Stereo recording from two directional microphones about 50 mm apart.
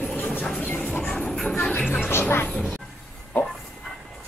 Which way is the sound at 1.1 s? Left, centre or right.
Centre.